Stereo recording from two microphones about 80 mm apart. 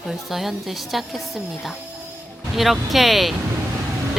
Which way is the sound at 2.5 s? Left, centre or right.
Centre.